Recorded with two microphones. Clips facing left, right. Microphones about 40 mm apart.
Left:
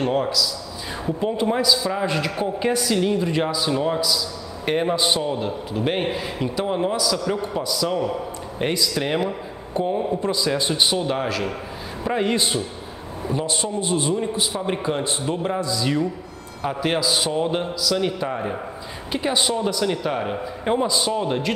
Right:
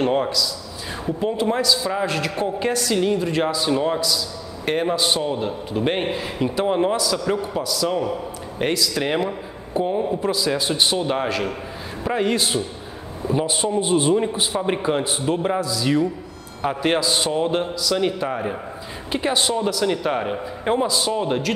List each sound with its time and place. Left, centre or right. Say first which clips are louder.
0.0 s a man's voice: right 1 dB; centre
5.2 s a man's voice: right 1 dB; centre
8.9 s a man's voice: right 1 dB; centre
13.3 s a man's voice: right 4 dB; centre
14.1 s a man's voice: right 3 dB; right
15.6 s a man's voice: right 2 dB; centre